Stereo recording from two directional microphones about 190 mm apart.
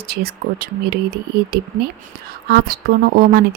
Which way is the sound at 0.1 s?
55° right (ahead or behind).